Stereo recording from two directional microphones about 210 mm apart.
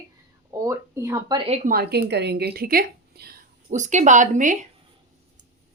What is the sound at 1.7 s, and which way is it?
A woman's voice, 50° right (ahead or behind).